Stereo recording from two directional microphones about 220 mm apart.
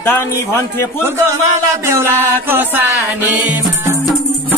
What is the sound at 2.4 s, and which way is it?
Music, 10° right (ahead or behind).